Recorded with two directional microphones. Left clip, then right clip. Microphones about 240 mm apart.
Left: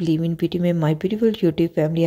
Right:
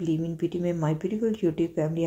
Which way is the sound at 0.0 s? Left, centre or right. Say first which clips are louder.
Left 6 dB; left.